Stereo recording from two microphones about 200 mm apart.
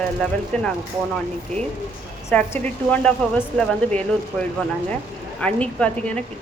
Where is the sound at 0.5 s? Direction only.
5° left (ahead or behind).